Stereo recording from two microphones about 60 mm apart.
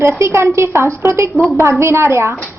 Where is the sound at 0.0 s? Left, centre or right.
Right.